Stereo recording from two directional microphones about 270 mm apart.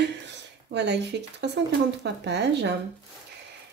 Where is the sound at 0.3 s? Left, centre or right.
Right.